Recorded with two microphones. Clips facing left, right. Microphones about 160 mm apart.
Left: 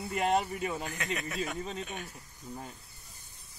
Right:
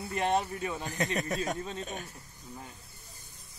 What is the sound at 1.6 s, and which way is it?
Speech, centre (ahead or behind).